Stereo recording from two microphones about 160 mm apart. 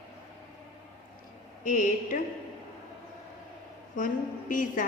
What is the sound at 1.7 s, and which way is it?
Speech, 55° left (ahead or behind).